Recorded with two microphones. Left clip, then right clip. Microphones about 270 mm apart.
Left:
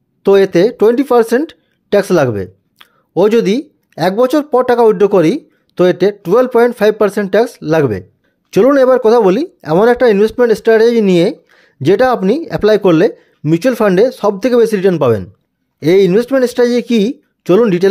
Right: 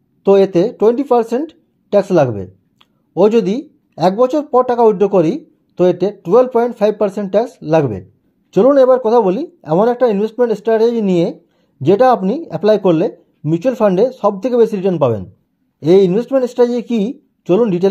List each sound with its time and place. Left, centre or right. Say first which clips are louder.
0.2 s speech: left 2 dB; left